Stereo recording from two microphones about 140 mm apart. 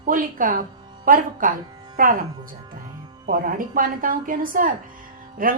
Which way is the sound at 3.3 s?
80° right.